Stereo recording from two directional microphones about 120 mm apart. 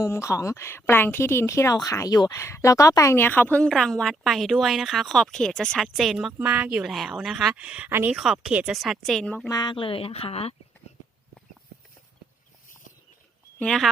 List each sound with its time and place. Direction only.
0.0 s speech: 25° left (ahead or behind); by 6.3 s centre (ahead or behind)
6.4 s speech: 15° right (ahead or behind)
6.8 s speech: centre (ahead or behind); by 8.1 s 20° right (ahead or behind)
8.1 s speech: centre (ahead or behind)
9.5 s speech: 40° left (ahead or behind); by 10.5 s 55° left (ahead or behind)
13.6 s speech: 5° left (ahead or behind)